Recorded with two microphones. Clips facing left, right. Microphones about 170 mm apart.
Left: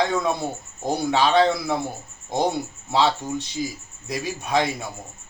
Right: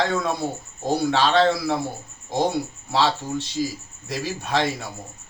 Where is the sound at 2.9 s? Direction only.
20° left (ahead or behind).